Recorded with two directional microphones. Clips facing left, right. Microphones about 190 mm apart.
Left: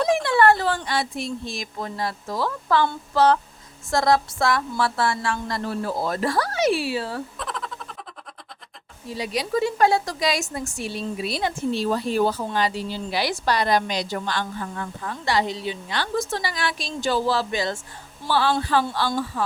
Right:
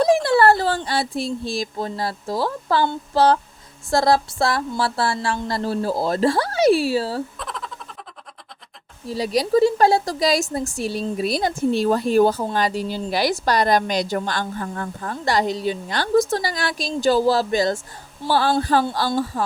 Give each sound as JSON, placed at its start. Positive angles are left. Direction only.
{"t": 0.0, "sound": "speech", "side_deg": -35}
{"t": 7.3, "sound": "a sound", "side_deg": 0}
{"t": 9.0, "sound": "speech", "side_deg": -35}